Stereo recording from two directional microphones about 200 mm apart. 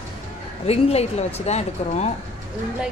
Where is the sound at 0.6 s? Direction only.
30° left (ahead or behind).